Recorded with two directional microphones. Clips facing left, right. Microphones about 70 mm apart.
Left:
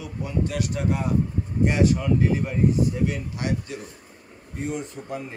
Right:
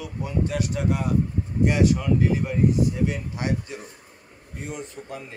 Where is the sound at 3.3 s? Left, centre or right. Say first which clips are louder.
Even; right.